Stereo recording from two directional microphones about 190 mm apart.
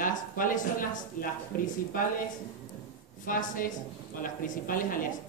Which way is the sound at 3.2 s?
45° left (ahead or behind).